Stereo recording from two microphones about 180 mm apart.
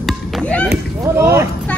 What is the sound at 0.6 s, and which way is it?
Speech, 15° right (ahead or behind).